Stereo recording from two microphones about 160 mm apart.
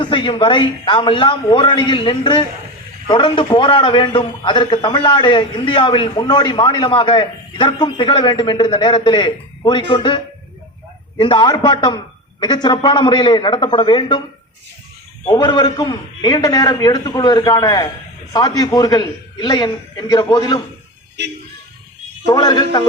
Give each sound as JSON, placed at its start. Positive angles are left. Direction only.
{"t": 0.0, "sound": "a man's voice", "side_deg": 30}
{"t": 11.2, "sound": "a man's voice", "side_deg": 30}
{"t": 15.3, "sound": "a man's voice", "side_deg": 30}
{"t": 21.2, "sound": "speech", "side_deg": -90}
{"t": 22.3, "sound": "a man's voice", "side_deg": 25}